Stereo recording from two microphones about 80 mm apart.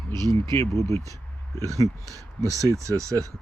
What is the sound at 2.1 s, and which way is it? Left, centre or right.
Speech, right.